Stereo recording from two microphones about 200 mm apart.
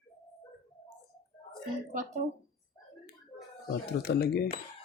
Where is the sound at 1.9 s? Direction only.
40° right (ahead or behind).